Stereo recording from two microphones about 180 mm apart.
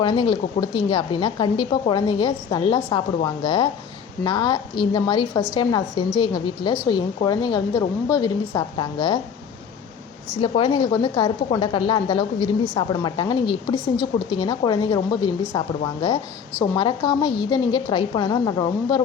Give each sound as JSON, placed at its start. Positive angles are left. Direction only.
{"t": 0.0, "sound": "a woman's voice", "side_deg": 25}
{"t": 10.3, "sound": "a woman's voice", "side_deg": 30}